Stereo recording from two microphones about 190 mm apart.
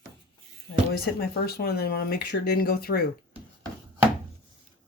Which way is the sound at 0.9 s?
55° left (ahead or behind).